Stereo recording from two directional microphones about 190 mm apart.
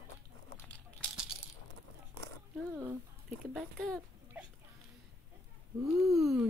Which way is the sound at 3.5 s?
Centre (ahead or behind).